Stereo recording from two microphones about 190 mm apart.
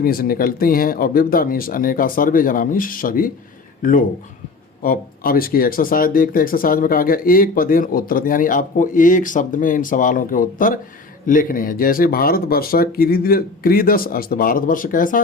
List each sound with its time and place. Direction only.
0.0 s speech: 50° left (ahead or behind)
4.8 s speech: 50° left (ahead or behind)